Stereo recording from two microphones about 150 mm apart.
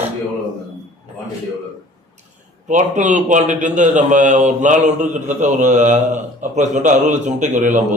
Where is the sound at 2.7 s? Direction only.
55° right (ahead or behind).